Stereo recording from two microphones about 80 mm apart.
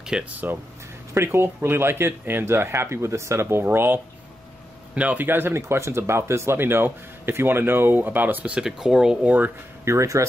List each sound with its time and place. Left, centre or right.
0.0 s speech: centre
1.1 s speech: right
8.5 s speech: centre
9.8 s speech: right